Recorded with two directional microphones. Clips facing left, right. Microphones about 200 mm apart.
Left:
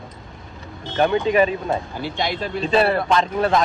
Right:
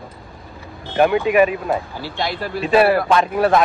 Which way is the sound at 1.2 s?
30° left (ahead or behind).